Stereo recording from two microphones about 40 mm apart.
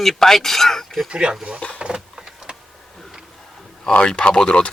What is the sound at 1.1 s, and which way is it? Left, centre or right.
Speech, right.